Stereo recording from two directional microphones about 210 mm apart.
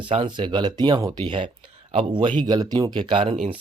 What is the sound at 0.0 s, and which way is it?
Speech, 25° right (ahead or behind).